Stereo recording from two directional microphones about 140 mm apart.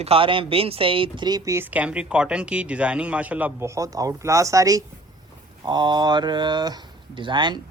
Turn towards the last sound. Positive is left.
turn(degrees=-35)  # may be behind; listen again after turning